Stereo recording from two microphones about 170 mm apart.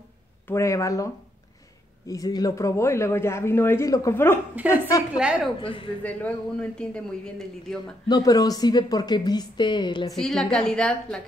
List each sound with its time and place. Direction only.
0.5 s speech: 15° left (ahead or behind)
5.1 s a man's voice: 5° right (ahead or behind)
5.6 s speech: 30° left (ahead or behind)
6.0 s a man's voice: 10° left (ahead or behind)
8.1 s a woman's voice: 20° left (ahead or behind)
10.1 s a man's voice: 5° left (ahead or behind)